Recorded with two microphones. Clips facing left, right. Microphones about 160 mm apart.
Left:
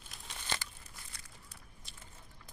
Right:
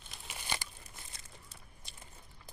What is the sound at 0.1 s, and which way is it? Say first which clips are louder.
Crumpling: even; 10° right (ahead or behind).